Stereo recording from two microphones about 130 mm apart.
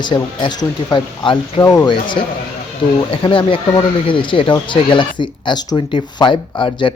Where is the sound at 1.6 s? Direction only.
25° left (ahead or behind).